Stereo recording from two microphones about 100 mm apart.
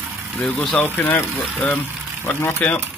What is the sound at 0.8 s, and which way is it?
Speech, 20° left (ahead or behind).